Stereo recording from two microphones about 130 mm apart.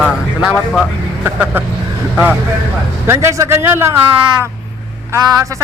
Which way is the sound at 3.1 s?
20° right (ahead or behind).